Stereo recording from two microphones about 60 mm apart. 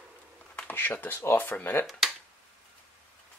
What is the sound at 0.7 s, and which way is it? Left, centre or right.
Speech, left.